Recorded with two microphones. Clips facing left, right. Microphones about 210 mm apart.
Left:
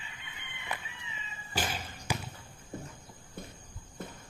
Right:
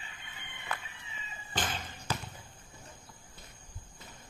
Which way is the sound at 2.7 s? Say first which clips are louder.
Left 13 dB; 55° left (ahead or behind).